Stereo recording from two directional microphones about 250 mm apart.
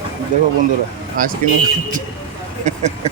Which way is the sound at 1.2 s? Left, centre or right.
Right.